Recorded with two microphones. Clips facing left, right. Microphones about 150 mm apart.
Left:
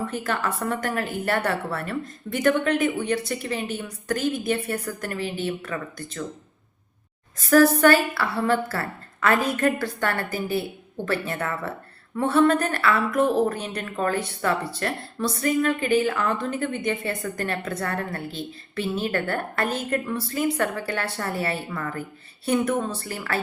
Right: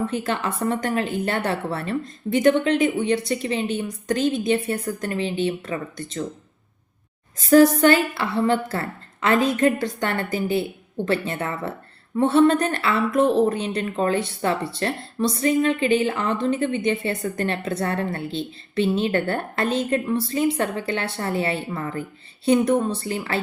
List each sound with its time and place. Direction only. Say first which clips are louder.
0.2 s speech: right 2 dB; 25° right (ahead or behind)
7.5 s speech: right 2 dB; 20° right (ahead or behind)